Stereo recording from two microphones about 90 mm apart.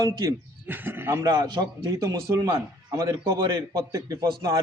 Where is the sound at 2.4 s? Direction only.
40° right (ahead or behind).